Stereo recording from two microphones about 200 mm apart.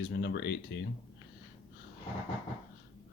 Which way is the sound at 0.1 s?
60° left (ahead or behind).